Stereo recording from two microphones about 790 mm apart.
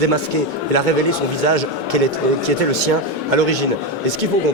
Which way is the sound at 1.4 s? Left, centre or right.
Right.